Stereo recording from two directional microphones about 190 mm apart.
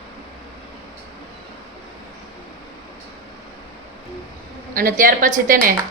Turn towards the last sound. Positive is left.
turn(degrees=-45)  # may be behind; listen again after turning